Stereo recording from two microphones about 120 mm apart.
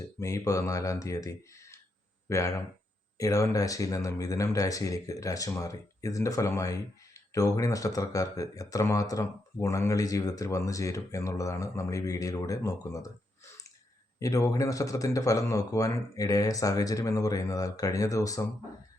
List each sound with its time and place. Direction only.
0.2 s speech: 25° left (ahead or behind)